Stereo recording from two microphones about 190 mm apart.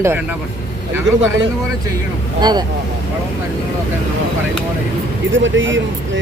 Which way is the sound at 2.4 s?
20° right (ahead or behind).